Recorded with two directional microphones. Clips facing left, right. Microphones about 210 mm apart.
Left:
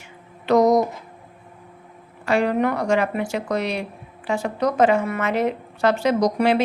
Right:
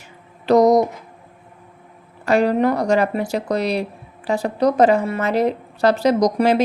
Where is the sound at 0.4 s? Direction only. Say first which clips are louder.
Right 3 dB; 35° right (ahead or behind).